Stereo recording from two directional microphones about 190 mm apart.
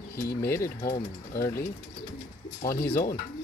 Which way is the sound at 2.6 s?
50° left (ahead or behind).